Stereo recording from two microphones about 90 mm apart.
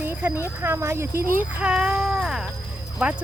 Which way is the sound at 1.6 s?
10° right (ahead or behind).